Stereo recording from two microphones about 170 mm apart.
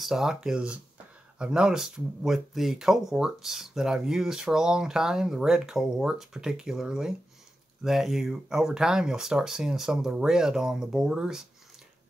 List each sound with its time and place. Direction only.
0.0 s speech: centre (ahead or behind)